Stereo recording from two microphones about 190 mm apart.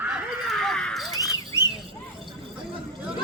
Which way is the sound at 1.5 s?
20° left (ahead or behind).